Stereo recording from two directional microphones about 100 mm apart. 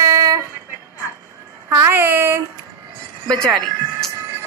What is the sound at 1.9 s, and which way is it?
Speech, 25° right (ahead or behind).